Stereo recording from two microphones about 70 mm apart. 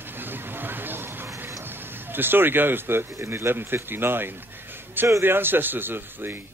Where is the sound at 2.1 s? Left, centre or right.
Right.